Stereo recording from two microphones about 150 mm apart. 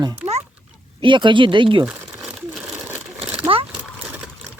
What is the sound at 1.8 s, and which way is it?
Crumpling, 20° right (ahead or behind).